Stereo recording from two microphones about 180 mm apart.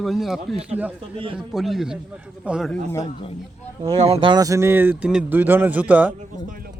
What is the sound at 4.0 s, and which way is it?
Speech, 35° right (ahead or behind).